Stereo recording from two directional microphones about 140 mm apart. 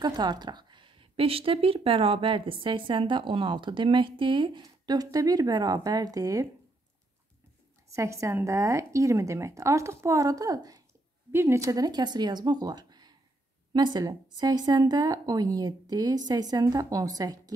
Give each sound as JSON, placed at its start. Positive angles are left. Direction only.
{"t": 0.0, "sound": "speech", "side_deg": -30}
{"t": 7.9, "sound": "speech", "side_deg": -20}